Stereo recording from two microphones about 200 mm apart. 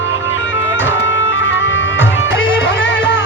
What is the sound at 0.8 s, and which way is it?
Music, 70° left (ahead or behind).